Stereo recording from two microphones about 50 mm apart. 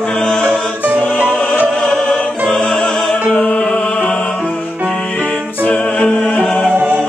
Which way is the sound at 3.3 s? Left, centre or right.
Left.